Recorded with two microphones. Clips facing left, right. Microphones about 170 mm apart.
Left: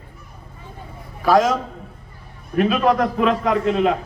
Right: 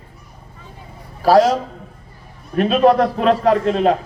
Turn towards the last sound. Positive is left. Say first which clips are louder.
# right 3 dB
turn(degrees=-35)  # may be behind; listen again after turning